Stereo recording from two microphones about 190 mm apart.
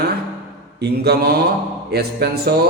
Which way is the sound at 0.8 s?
55° right (ahead or behind).